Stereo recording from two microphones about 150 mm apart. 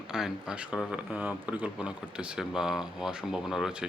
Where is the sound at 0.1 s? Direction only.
5° right (ahead or behind).